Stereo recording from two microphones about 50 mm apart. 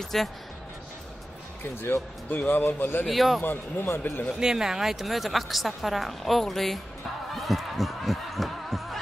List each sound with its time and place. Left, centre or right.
0.0 s speech: centre
1.6 s speech: left
3.1 s speech: centre
3.4 s speech: left
4.4 s speech: centre
7.3 s music: centre